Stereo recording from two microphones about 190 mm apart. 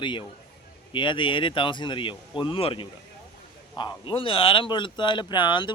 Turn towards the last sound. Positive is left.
turn(degrees=25)  # may be behind; listen again after turning